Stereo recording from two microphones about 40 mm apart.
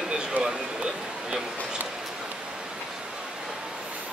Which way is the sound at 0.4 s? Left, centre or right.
Right.